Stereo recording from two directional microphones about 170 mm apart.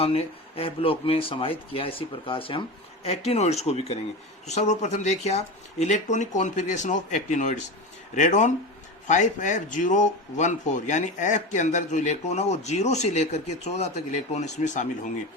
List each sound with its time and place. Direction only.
0.0 s speech: 35° left (ahead or behind)